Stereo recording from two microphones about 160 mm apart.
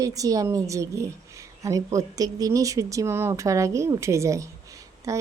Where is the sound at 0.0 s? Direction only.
20° right (ahead or behind).